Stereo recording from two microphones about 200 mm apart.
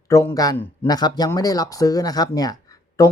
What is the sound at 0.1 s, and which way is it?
Speech, 15° left (ahead or behind).